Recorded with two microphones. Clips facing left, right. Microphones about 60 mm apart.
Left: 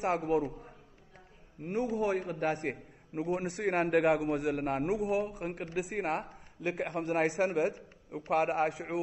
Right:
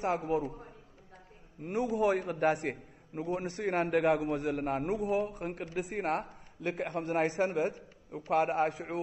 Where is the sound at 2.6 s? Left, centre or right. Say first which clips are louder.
Even; centre.